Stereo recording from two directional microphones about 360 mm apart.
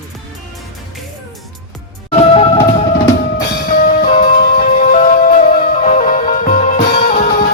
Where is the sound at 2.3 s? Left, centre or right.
Centre.